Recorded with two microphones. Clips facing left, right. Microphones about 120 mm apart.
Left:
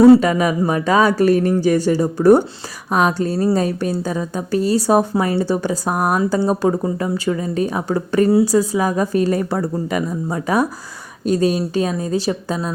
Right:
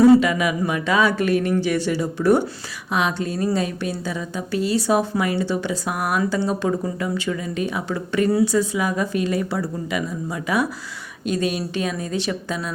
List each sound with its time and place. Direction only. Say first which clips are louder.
0.0 s a woman's voice: left 4 dB; 35° left (ahead or behind)